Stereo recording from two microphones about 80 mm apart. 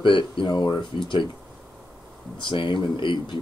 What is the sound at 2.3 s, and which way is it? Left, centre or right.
Speech, left.